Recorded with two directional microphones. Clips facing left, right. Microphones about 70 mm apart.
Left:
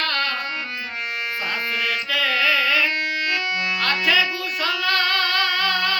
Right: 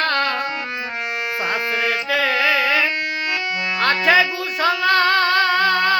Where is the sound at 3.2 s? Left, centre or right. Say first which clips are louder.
Right 1 dB; centre.